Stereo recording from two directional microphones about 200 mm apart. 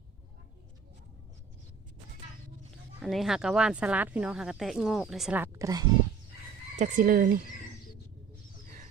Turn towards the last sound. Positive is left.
turn(degrees=-45)  # may be behind; listen again after turning